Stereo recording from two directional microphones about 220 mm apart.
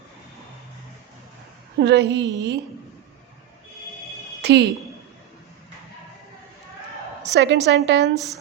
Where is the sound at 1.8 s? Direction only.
50° right (ahead or behind).